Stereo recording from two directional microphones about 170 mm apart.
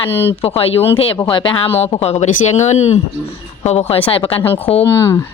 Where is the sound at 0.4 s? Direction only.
35° left (ahead or behind).